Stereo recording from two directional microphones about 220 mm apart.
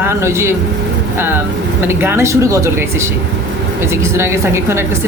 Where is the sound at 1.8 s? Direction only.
10° right (ahead or behind).